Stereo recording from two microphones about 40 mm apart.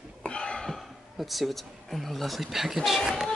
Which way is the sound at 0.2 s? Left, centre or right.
Left.